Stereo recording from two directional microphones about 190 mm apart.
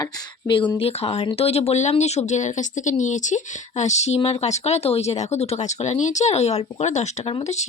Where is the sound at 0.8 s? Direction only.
30° left (ahead or behind).